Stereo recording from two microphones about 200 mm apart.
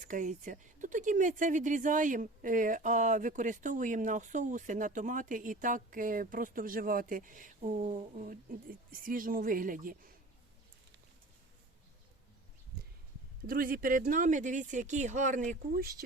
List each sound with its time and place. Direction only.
0.0 s speech: 40° right (ahead or behind)
13.5 s speech: 45° right (ahead or behind)